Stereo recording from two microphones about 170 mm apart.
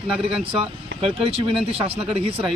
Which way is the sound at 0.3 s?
30° right (ahead or behind).